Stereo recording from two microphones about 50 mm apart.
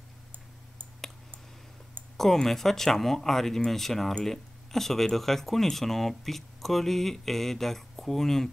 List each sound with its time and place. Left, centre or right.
2.1 s speech: centre